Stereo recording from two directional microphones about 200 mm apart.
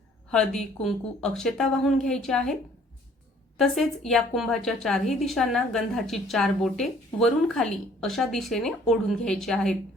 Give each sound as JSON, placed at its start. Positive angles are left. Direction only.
{"t": 0.3, "sound": "a woman's voice", "side_deg": 5}
{"t": 3.6, "sound": "a woman's voice", "side_deg": 0}